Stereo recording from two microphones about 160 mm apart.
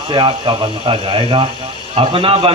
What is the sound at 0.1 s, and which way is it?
A man's voice, 30° right (ahead or behind).